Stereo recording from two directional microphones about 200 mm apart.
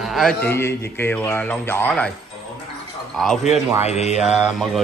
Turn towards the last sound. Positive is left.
turn(degrees=0)  # may be behind; listen again after turning